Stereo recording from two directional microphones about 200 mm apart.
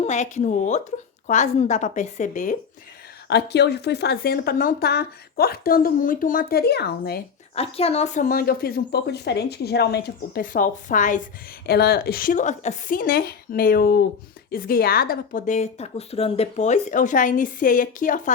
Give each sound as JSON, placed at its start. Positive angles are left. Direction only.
{"t": 0.0, "sound": "a woman's voice", "side_deg": 35}
{"t": 3.2, "sound": "speech", "side_deg": 55}
{"t": 7.5, "sound": "speech", "side_deg": 30}
{"t": 11.6, "sound": "a woman's voice", "side_deg": 55}